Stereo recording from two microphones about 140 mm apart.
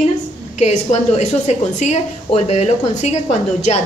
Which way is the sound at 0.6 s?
55° left (ahead or behind).